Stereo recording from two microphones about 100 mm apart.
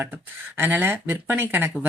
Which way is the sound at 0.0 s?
20° right (ahead or behind).